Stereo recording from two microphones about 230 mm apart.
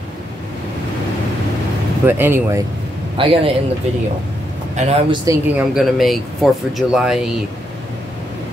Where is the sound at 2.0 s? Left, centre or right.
Centre.